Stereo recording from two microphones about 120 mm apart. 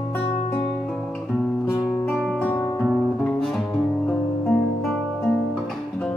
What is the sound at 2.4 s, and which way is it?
Music, 15° left (ahead or behind).